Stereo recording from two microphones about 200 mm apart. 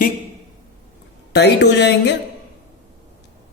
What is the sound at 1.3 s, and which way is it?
Speech, 55° left (ahead or behind).